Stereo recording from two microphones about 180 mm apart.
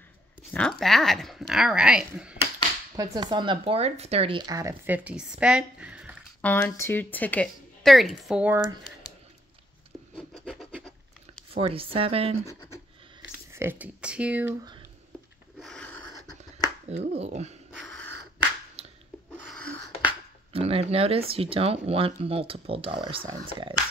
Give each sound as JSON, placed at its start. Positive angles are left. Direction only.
{"t": 0.5, "sound": "speech", "side_deg": 5}
{"t": 3.0, "sound": "speech", "side_deg": -25}
{"t": 6.4, "sound": "speech", "side_deg": 10}
{"t": 10.1, "sound": "scratch", "side_deg": 5}
{"t": 11.5, "sound": "speech", "side_deg": -30}
{"t": 13.2, "sound": "speech", "side_deg": -15}
{"t": 15.6, "sound": "a sound", "side_deg": 5}
{"t": 16.9, "sound": "speech", "side_deg": -35}
{"t": 17.7, "sound": "a sound", "side_deg": 5}
{"t": 18.8, "sound": "a sound", "side_deg": -35}
{"t": 20.5, "sound": "speech", "side_deg": -30}